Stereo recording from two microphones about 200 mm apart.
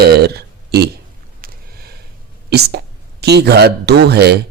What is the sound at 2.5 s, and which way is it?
Speech, 55° right (ahead or behind).